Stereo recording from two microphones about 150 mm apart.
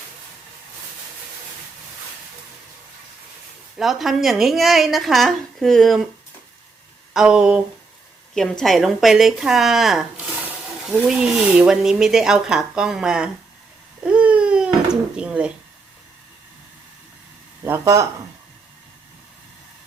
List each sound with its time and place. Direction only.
3.8 s speech: centre (ahead or behind)
7.1 s speech: 5° right (ahead or behind)
14.0 s a sound: 10° right (ahead or behind)
15.1 s speech: 5° right (ahead or behind)
17.7 s speech: 20° right (ahead or behind)